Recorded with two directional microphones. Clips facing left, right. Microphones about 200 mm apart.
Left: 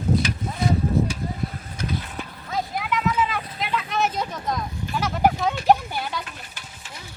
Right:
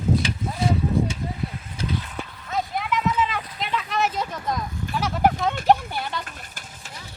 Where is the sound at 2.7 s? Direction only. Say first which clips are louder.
Even; centre (ahead or behind).